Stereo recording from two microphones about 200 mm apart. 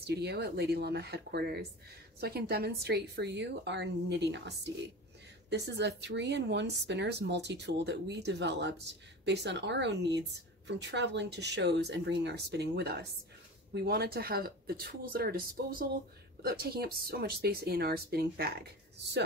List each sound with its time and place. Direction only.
0.0 s speech: 55° right (ahead or behind)